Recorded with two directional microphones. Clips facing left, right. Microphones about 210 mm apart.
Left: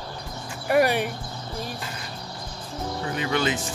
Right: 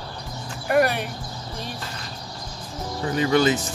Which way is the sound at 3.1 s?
40° right (ahead or behind).